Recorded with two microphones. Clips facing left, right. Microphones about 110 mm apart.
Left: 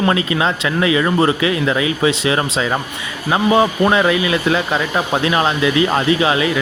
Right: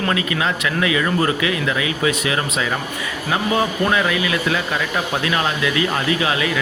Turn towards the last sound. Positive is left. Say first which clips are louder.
# left 5 dB
turn(degrees=25)  # may be behind; listen again after turning